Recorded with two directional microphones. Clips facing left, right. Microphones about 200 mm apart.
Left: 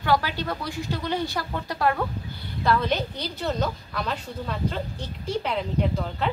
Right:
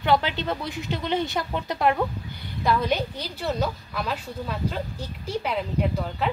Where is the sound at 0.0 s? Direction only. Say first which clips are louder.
Right 1 dB; 20° right (ahead or behind).